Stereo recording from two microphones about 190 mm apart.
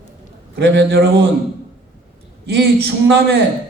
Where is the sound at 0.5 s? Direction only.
60° right (ahead or behind).